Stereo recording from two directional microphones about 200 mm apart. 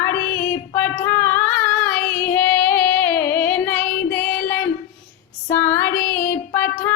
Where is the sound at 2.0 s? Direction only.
50° left (ahead or behind).